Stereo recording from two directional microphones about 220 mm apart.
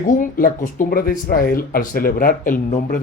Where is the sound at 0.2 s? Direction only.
40° left (ahead or behind).